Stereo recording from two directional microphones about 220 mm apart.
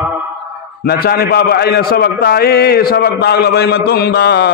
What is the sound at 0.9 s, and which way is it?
A man's voice, 45° left (ahead or behind).